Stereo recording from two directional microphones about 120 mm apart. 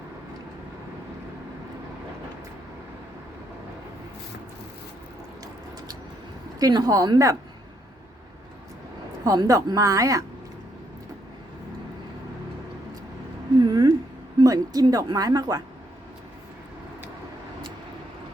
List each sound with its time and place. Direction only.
6.6 s speech: 30° right (ahead or behind)
9.2 s a woman's voice: 30° right (ahead or behind)
13.6 s a sound: 35° right (ahead or behind)
14.4 s speech: 30° right (ahead or behind)